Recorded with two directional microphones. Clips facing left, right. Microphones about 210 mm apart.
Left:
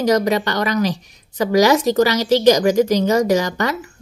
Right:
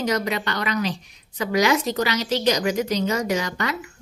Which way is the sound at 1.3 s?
40° left (ahead or behind).